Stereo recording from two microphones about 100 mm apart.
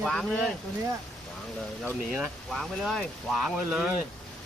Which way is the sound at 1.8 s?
10° right (ahead or behind).